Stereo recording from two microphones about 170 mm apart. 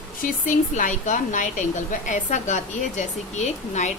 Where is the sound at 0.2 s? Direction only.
50° left (ahead or behind).